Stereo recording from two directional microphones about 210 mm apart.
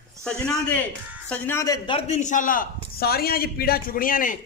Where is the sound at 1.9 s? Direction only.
30° left (ahead or behind).